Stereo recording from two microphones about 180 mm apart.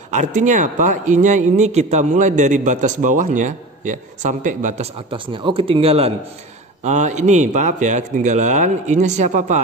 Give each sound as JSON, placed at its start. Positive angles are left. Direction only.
{"t": 0.1, "sound": "a man's voice", "side_deg": -45}
{"t": 5.1, "sound": "a man's voice", "side_deg": -30}